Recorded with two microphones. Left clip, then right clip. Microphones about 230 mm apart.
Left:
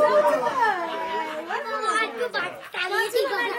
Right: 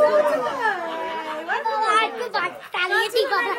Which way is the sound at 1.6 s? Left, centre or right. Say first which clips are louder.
Right 5 dB; right.